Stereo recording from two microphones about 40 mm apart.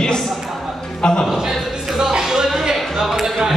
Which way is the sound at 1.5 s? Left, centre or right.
Centre.